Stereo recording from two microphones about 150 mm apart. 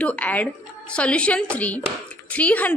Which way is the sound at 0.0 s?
10° left (ahead or behind).